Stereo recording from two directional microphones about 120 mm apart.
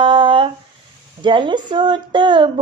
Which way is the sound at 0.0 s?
45° right (ahead or behind).